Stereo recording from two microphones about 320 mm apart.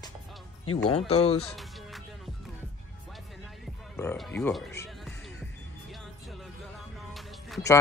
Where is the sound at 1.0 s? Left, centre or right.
Centre.